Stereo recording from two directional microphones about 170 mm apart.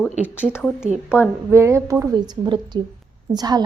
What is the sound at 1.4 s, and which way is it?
A woman's voice, 15° right (ahead or behind).